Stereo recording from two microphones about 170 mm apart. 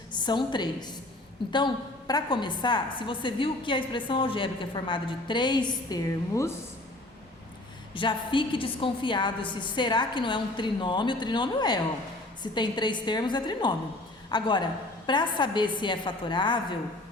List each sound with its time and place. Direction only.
0.1 s a woman's voice: 25° left (ahead or behind)
7.9 s a woman's voice: 30° left (ahead or behind)